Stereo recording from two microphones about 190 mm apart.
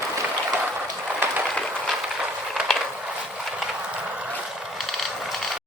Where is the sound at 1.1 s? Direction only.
10° right (ahead or behind).